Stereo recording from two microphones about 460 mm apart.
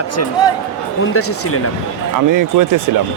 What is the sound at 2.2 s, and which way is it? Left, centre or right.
Speech, right.